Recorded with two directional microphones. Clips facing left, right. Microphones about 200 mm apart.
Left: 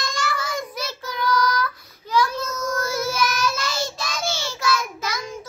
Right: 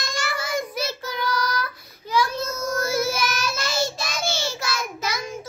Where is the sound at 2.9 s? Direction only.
10° right (ahead or behind).